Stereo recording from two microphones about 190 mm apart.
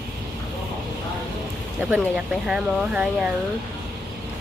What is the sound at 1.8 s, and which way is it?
Speech, 5° right (ahead or behind).